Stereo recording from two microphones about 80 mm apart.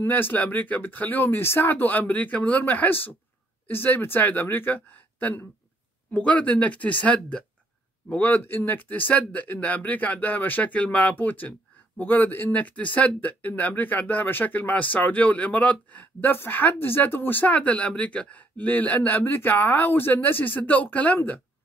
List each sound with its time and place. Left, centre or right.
0.0 s speech: left